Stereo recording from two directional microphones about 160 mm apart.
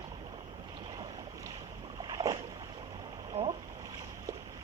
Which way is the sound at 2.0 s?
25° right (ahead or behind).